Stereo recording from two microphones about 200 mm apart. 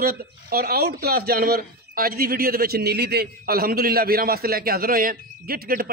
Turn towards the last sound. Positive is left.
turn(degrees=-50)  # may be behind; listen again after turning